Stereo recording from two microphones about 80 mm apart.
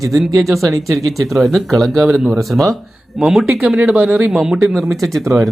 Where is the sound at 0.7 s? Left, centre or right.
Right.